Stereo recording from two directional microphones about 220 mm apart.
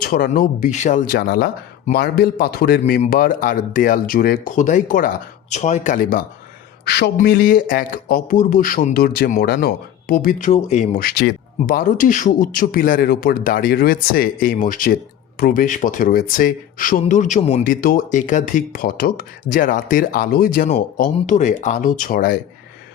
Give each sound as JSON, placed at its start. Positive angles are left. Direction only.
{"t": 0.0, "sound": "speech", "side_deg": 40}